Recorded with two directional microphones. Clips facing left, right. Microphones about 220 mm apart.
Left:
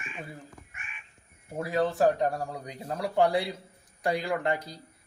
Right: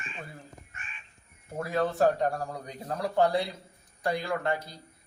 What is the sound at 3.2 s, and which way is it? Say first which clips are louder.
Speech: left 1 dB; 15° left (ahead or behind).